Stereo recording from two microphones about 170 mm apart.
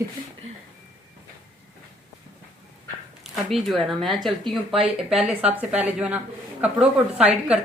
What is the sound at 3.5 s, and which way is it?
A woman's voice, centre (ahead or behind).